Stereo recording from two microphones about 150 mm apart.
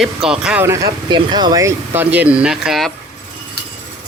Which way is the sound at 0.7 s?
25° right (ahead or behind).